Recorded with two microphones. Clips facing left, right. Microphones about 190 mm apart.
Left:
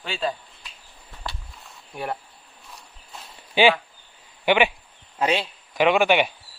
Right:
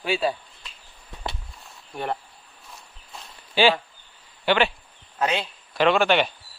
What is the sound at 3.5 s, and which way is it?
Speech, 15° left (ahead or behind).